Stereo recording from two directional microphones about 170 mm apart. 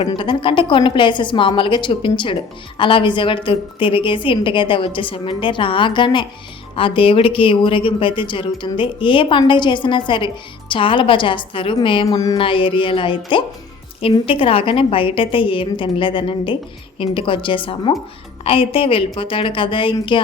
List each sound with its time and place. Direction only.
0.0 s a woman's voice: 30° left (ahead or behind)